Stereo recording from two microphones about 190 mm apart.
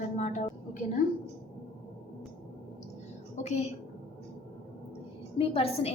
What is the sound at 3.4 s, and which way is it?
Speech, 35° left (ahead or behind).